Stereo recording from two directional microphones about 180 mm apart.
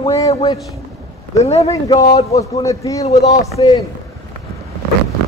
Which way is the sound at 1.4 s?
35° left (ahead or behind).